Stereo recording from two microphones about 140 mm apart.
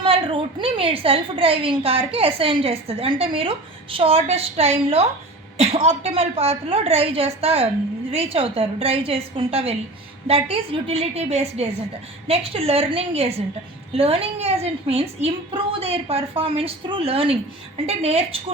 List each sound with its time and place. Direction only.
0.0 s a woman's voice: 40° right (ahead or behind)